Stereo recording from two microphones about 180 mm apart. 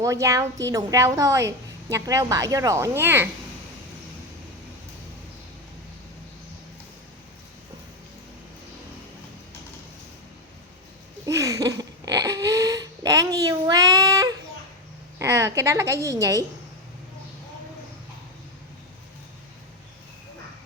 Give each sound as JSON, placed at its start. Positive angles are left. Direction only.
{"t": 0.0, "sound": "a woman's voice", "side_deg": -15}
{"t": 11.3, "sound": "a sound", "side_deg": -15}
{"t": 15.2, "sound": "a woman's voice", "side_deg": -15}